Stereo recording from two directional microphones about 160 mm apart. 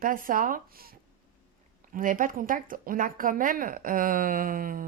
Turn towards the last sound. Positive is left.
turn(degrees=-60)  # may be behind; listen again after turning